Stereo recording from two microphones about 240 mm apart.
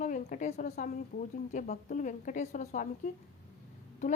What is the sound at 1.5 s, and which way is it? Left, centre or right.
A woman's voice, left.